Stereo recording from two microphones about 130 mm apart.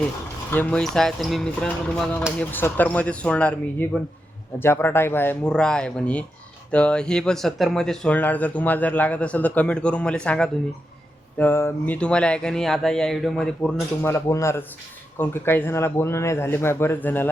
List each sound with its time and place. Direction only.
0.5 s speech: 10° left (ahead or behind)
2.4 s speech: 15° left (ahead or behind)
11.3 s speech: 15° left (ahead or behind)
14.0 s speech: 20° left (ahead or behind)